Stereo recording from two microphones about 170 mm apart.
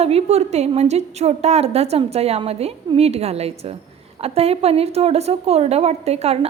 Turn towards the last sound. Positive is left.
turn(degrees=-40)  # may be behind; listen again after turning